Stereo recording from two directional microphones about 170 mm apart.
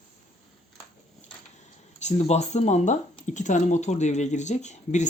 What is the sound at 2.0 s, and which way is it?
Speech, 40° left (ahead or behind).